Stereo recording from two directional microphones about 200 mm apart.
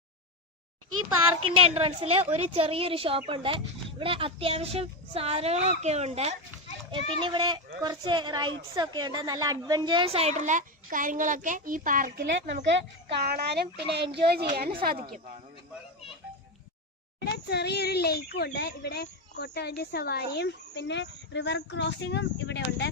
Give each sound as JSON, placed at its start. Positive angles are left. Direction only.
{"t": 0.9, "sound": "a child's voice", "side_deg": -90}
{"t": 1.5, "sound": "a woman's voice", "side_deg": -30}
{"t": 13.1, "sound": "speech", "side_deg": -50}
{"t": 15.0, "sound": "speech", "side_deg": -45}
{"t": 17.2, "sound": "a child's voice", "side_deg": 55}